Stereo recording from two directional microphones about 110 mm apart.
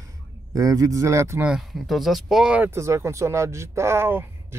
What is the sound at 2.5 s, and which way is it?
Speech, 20° right (ahead or behind).